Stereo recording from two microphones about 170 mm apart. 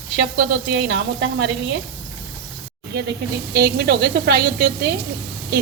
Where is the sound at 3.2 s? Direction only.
70° right (ahead or behind).